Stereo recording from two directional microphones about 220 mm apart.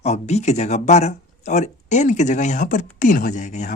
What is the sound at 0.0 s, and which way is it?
Speech, 30° left (ahead or behind).